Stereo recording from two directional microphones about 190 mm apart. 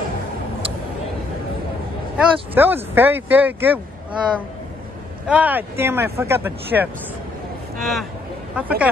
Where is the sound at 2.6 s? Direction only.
10° right (ahead or behind).